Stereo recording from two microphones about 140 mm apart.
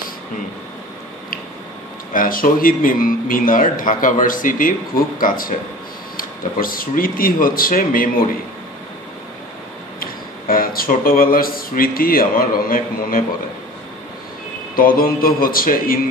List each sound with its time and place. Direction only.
2.1 s speech: 85° left
9.9 s speech: 90° left
14.8 s speech: 90° left